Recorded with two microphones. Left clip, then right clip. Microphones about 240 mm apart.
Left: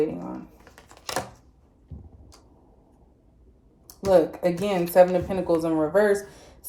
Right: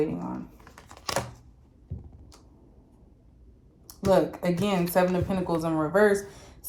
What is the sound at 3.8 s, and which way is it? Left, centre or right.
A woman's voice, right.